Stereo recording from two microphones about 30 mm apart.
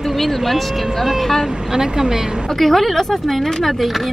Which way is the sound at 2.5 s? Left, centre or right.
Centre.